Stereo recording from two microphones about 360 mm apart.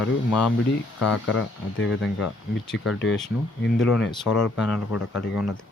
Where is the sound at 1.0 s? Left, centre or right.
Left.